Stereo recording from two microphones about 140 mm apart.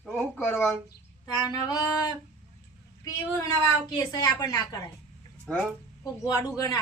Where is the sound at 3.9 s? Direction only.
30° left (ahead or behind).